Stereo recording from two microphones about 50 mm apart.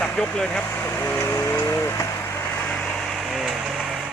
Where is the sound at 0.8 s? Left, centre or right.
Left.